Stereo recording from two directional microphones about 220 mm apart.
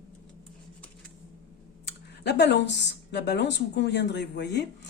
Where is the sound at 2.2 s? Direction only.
50° left (ahead or behind).